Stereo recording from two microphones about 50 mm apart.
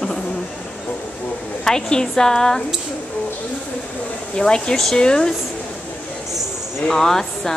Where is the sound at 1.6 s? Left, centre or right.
Centre.